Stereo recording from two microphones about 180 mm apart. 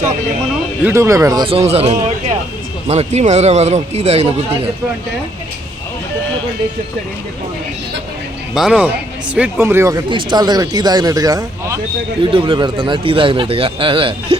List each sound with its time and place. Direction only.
0.9 s speech: 15° right (ahead or behind)
1.5 s speech: 35° right (ahead or behind)
8.5 s speech: 5° right (ahead or behind); by 14.3 s 30° right (ahead or behind)